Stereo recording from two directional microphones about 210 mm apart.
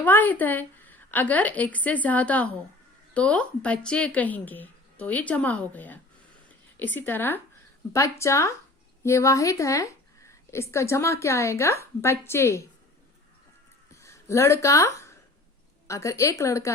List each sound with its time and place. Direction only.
0.0 s a woman's voice: 10° left (ahead or behind)
13.9 s a sound: 15° left (ahead or behind)
15.9 s a woman's voice: 15° left (ahead or behind)